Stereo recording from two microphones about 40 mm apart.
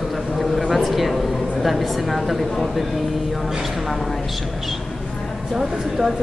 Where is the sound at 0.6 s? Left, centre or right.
Centre.